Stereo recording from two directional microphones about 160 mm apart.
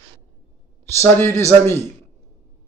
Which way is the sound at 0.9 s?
15° left (ahead or behind).